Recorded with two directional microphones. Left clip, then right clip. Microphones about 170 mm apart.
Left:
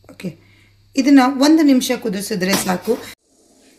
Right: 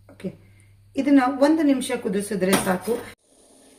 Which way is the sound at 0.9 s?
55° left (ahead or behind).